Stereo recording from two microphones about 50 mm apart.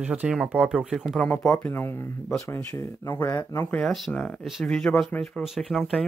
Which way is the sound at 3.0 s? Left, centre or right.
Left.